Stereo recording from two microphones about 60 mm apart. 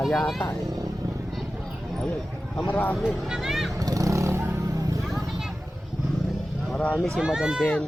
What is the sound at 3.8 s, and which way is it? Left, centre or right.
Vehicle, right.